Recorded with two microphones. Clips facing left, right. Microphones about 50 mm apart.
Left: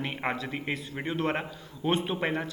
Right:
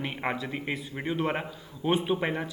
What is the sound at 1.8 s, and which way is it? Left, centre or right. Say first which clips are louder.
Speech: right 1 dB; centre.